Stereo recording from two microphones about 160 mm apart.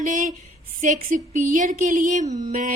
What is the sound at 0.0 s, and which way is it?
A woman's voice, 50° right (ahead or behind).